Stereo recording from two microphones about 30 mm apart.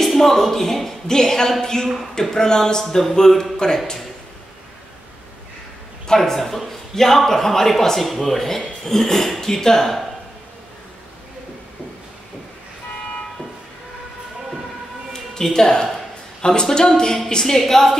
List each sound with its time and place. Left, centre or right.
0.0 s speech: centre
1.0 s speech: centre
6.1 s speech: centre
15.3 s speech: centre